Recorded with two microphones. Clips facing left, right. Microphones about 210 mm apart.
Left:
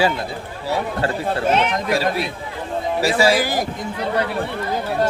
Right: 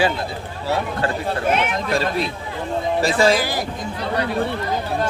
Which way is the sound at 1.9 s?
10° left (ahead or behind).